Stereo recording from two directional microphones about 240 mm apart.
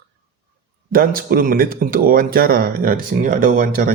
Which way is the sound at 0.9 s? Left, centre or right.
Right.